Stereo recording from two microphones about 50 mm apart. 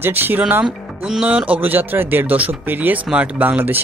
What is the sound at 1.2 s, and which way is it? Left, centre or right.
Speech, right.